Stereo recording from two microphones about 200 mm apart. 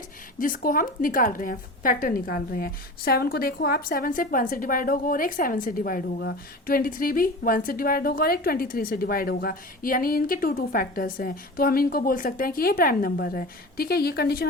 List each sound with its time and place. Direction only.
0.3 s a woman's voice: 45° left (ahead or behind)